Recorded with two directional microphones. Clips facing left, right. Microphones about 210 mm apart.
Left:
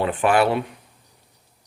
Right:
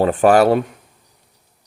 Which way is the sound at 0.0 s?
40° right (ahead or behind).